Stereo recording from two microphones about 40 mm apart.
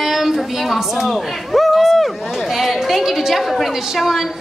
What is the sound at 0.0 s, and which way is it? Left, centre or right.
A woman's voice, centre.